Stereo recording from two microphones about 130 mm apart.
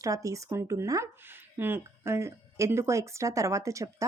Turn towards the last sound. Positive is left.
turn(degrees=-25)  # may be behind; listen again after turning